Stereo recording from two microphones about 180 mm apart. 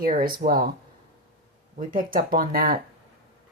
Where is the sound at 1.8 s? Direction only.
50° right (ahead or behind).